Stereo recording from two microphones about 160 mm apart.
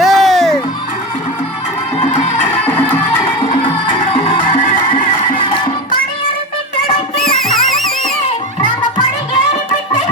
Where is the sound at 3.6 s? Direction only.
30° left (ahead or behind).